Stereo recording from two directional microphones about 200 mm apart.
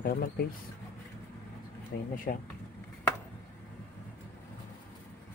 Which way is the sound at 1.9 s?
55° left (ahead or behind).